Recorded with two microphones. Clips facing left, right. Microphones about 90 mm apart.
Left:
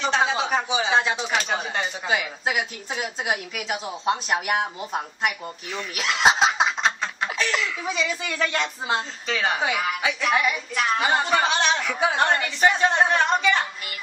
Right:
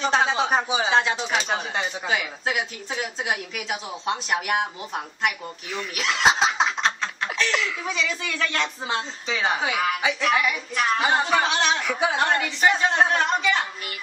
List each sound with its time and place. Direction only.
0.0 s speech: 35° right (ahead or behind)
0.8 s speech: centre (ahead or behind)